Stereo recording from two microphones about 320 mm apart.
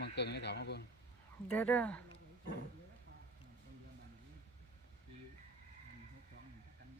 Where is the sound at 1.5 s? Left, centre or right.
Centre.